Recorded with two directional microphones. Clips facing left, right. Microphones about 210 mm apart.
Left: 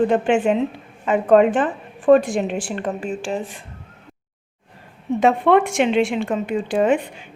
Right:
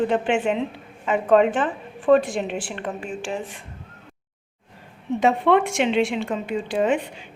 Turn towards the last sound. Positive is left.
turn(degrees=50)  # may be behind; listen again after turning